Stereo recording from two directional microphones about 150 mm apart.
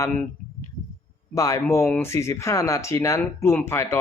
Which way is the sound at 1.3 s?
20° left (ahead or behind).